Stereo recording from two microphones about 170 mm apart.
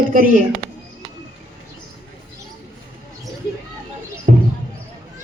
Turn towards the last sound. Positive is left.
turn(degrees=-55)  # may be behind; listen again after turning